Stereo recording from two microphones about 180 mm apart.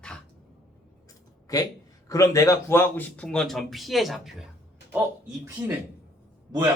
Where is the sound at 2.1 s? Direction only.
15° left (ahead or behind); by 4.5 s centre (ahead or behind).